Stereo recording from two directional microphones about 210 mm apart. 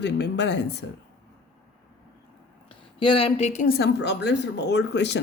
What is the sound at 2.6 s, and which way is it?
A woman's voice, 25° left (ahead or behind).